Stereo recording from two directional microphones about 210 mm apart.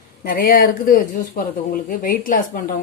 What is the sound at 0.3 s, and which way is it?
A woman's voice, 45° left (ahead or behind).